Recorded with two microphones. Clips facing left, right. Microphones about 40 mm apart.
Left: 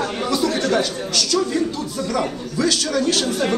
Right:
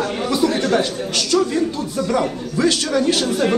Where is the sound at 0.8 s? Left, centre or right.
Right.